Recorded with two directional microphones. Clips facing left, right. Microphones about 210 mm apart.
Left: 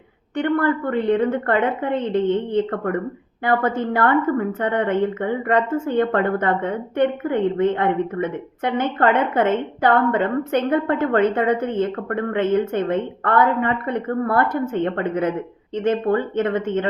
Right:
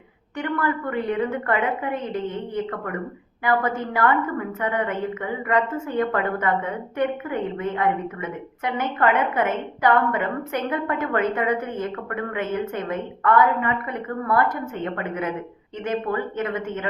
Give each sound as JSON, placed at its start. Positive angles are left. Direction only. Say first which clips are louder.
{"t": 0.6, "sound": "a woman's voice", "louder": "left 5 dB", "side_deg": 30}